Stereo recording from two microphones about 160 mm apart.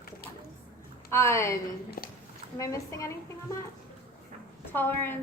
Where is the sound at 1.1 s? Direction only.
15° left (ahead or behind).